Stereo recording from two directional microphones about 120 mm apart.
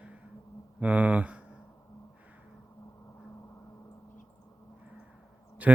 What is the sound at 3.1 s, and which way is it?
Vehicle, 25° left (ahead or behind).